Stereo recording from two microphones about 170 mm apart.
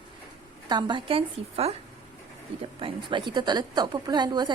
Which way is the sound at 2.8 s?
30° right (ahead or behind).